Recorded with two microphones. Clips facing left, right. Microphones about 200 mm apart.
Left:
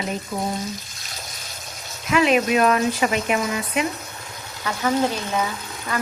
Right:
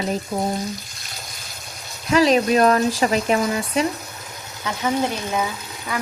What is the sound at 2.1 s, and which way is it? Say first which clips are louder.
Speech: right 2 dB; 35° right (ahead or behind).